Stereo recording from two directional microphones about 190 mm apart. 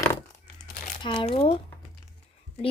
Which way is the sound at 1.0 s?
25° left (ahead or behind).